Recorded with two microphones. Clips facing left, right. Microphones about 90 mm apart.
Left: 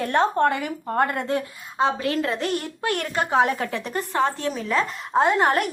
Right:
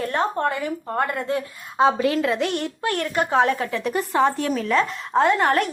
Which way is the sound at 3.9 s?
5° right (ahead or behind).